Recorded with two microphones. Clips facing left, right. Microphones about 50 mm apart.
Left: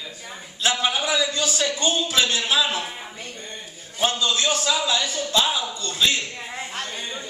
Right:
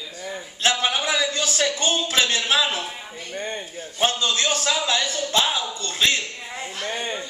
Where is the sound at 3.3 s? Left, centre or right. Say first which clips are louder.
Right 8 dB; right.